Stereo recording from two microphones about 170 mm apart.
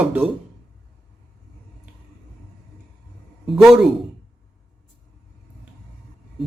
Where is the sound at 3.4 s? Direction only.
Centre (ahead or behind).